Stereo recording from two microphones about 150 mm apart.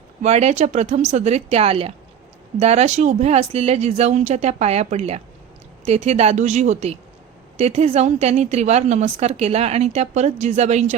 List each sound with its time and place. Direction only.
0.2 s a woman's voice: 45° right (ahead or behind)